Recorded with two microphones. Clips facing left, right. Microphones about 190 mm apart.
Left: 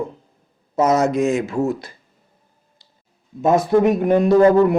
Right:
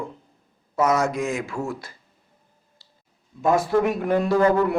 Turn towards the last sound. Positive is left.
turn(degrees=20)  # may be behind; listen again after turning